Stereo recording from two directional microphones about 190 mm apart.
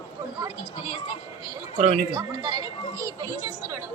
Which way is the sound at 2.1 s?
20° right (ahead or behind).